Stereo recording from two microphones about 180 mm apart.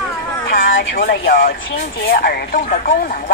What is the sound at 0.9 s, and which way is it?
Speech, 55° left (ahead or behind).